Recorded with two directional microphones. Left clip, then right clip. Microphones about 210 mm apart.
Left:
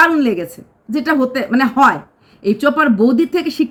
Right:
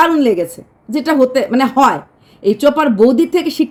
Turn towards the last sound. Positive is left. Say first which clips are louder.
# right 2 dB
turn(degrees=20)  # may be behind; listen again after turning